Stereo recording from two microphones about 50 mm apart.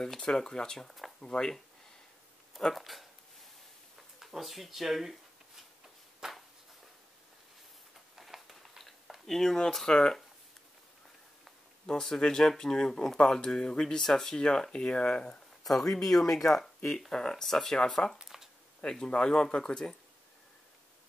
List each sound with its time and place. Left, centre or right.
0.0 s speech: centre
1.2 s speech: centre
2.6 s speech: centre
4.2 s speech: centre
6.2 s a sound: centre
8.2 s a sound: centre
9.3 s speech: centre
11.8 s speech: centre
15.6 s speech: centre
18.1 s a sound: centre
18.8 s speech: centre